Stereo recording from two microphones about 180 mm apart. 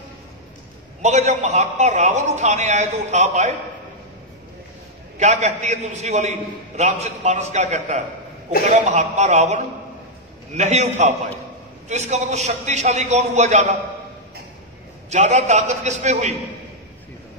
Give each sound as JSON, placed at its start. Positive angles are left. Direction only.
{"t": 1.0, "sound": "a man's voice", "side_deg": -40}
{"t": 5.2, "sound": "a man's voice", "side_deg": -40}
{"t": 15.0, "sound": "a man's voice", "side_deg": -40}